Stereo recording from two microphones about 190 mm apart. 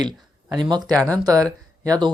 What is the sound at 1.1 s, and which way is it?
Speech, 15° right (ahead or behind).